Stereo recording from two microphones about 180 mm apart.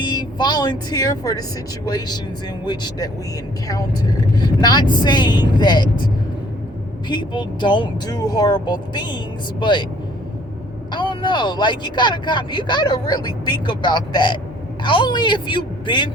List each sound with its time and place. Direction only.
0.0 s speech: 25° left (ahead or behind)
2.6 s speech: 25° left (ahead or behind)
4.6 s speech: 25° left (ahead or behind)
7.1 s speech: 25° left (ahead or behind)
10.9 s speech: 25° left (ahead or behind)